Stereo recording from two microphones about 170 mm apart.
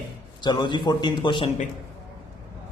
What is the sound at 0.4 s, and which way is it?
A man's voice, 25° left (ahead or behind).